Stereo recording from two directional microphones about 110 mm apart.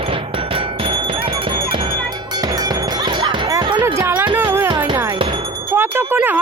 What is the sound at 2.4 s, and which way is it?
Music, 35° right (ahead or behind).